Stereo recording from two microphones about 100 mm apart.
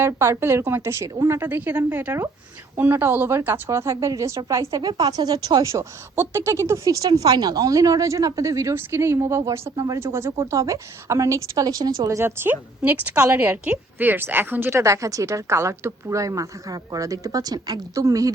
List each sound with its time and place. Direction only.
0.0 s a woman's voice: 25° right (ahead or behind)